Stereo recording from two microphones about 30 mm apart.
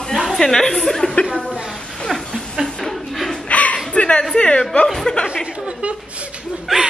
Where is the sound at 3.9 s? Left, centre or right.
Left.